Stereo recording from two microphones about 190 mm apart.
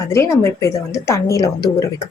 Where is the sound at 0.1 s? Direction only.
15° left (ahead or behind).